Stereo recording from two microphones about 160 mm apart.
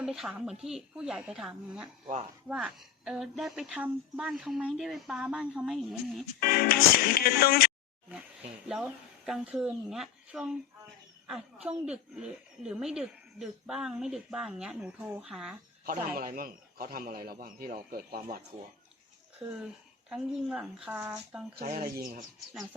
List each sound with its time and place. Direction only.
0.0 s speech: 5° right (ahead or behind)
6.4 s speech: 70° left (ahead or behind)
8.6 s speech: 5° right (ahead or behind)
16.1 s a man's voice: 60° right (ahead or behind)
19.5 s speech: 5° right (ahead or behind)
21.5 s a man's voice: 60° right (ahead or behind)